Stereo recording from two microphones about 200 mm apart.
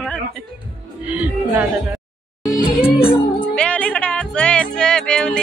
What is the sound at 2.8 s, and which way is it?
Music, 30° left (ahead or behind).